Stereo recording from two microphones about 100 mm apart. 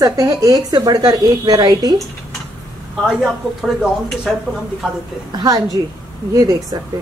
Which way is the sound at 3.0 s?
5° right (ahead or behind).